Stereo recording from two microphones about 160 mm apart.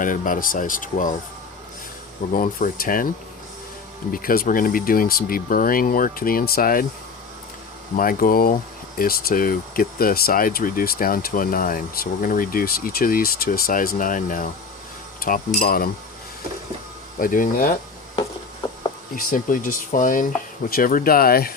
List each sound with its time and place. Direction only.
0.0 s speech: 55° left (ahead or behind)
2.3 s speech: 60° left (ahead or behind)
4.1 s speech: 65° left (ahead or behind)
7.9 s speech: 60° left (ahead or behind)
15.6 s speech: 65° left (ahead or behind)
17.2 s speech: 60° left (ahead or behind)
18.6 s a sound: 30° left (ahead or behind)
19.1 s speech: 60° left (ahead or behind)